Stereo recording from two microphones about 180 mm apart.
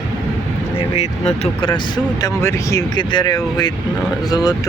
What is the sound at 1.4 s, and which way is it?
Speech, 25° left (ahead or behind).